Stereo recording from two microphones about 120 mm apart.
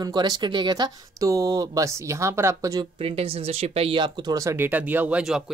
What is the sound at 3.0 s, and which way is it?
Speech, 55° right (ahead or behind).